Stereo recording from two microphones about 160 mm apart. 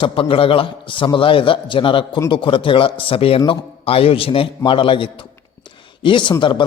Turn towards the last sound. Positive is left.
turn(degrees=30)  # may be behind; listen again after turning